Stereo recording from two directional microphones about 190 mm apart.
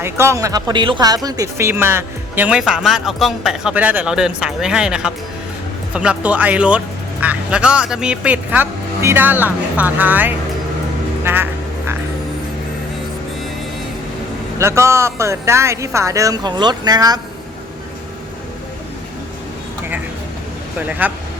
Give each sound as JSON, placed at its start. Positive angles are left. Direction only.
{"t": 0.0, "sound": "speech", "side_deg": -15}
{"t": 11.2, "sound": "music", "side_deg": -10}
{"t": 14.6, "sound": "speech", "side_deg": -15}
{"t": 21.0, "sound": "speech", "side_deg": -10}